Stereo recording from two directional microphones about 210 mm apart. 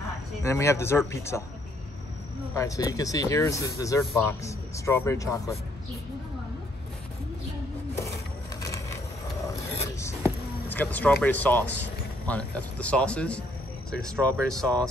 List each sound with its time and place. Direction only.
0.4 s speech: 15° left (ahead or behind)
2.5 s speech: 15° left (ahead or behind)
10.7 s speech: 10° left (ahead or behind)